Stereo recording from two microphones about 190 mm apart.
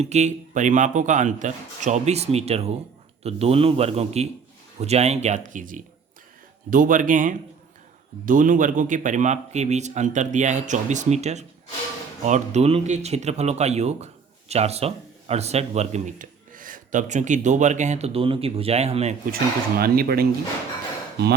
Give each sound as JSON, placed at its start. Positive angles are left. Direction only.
{"t": 0.0, "sound": "speech", "side_deg": -35}
{"t": 19.3, "sound": "speech", "side_deg": -50}